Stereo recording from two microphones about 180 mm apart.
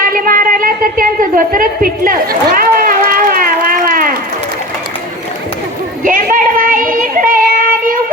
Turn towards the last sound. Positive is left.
turn(degrees=-50)  # may be behind; listen again after turning